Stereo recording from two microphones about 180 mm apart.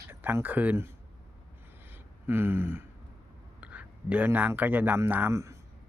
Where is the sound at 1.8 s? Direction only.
10° right (ahead or behind).